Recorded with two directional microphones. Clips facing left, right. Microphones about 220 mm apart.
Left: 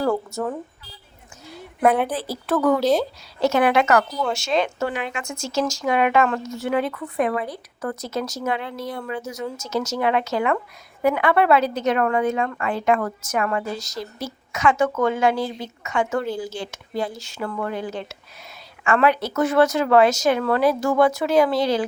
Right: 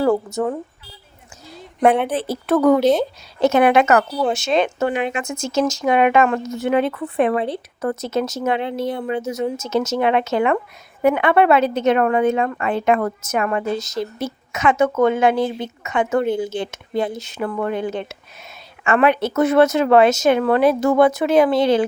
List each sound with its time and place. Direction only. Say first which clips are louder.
2.0 s a woman's voice: right 5 dB; 25° right (ahead or behind)